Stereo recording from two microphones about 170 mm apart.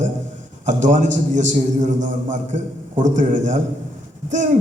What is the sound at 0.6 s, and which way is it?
A man's voice, 45° right (ahead or behind).